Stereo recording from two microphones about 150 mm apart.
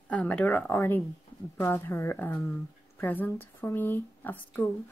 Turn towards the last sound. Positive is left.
turn(degrees=15)  # may be behind; listen again after turning